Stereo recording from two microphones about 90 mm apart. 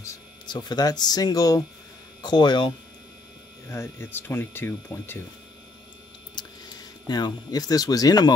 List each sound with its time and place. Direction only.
0.5 s speech: 50° left (ahead or behind)
2.2 s speech: 55° left (ahead or behind)
3.6 s speech: 30° left (ahead or behind)
6.3 s speech: 50° left (ahead or behind)